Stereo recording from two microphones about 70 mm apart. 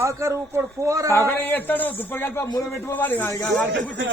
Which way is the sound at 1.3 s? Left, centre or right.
Left.